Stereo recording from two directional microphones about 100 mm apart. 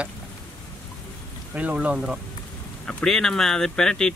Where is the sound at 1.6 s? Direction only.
15° right (ahead or behind).